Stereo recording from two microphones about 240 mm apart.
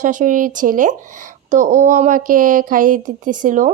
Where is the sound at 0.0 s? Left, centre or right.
Right.